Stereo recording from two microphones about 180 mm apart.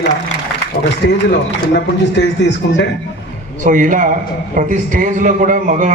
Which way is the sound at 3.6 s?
45° right (ahead or behind).